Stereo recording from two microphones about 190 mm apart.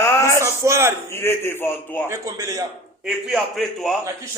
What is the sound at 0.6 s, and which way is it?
Speech, 15° right (ahead or behind).